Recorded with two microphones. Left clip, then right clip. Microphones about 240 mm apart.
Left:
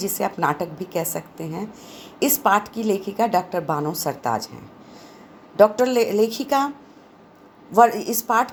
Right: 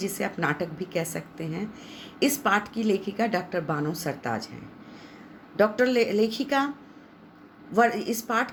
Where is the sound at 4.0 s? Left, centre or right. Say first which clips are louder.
Left 6 dB; left.